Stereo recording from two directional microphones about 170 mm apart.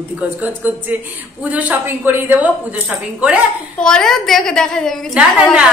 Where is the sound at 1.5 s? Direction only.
10° right (ahead or behind).